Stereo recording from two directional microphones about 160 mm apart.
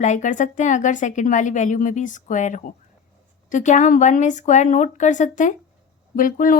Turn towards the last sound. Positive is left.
turn(degrees=60)  # may be behind; listen again after turning